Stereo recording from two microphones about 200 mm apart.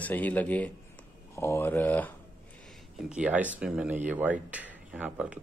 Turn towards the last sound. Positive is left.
turn(degrees=-5)  # may be behind; listen again after turning